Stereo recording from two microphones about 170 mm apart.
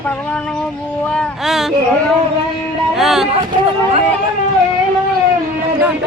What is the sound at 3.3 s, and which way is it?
Speech, 35° right (ahead or behind).